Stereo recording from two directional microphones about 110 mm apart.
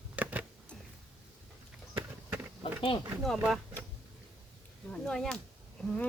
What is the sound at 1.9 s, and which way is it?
Run, 20° right (ahead or behind).